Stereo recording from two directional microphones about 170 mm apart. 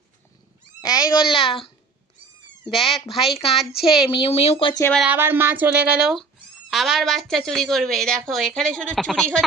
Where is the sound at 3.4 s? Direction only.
35° left (ahead or behind).